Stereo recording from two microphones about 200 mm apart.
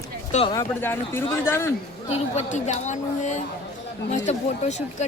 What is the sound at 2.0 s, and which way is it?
Speech, 35° left (ahead or behind).